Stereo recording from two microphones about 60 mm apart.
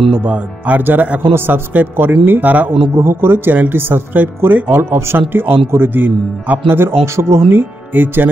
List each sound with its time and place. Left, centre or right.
0.2 s speech: right
3.0 s speech: right
6.0 s speech: right
7.9 s speech: right